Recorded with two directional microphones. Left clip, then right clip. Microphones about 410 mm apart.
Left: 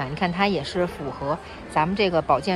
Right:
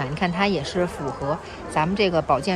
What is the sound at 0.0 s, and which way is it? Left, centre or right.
Speech, centre.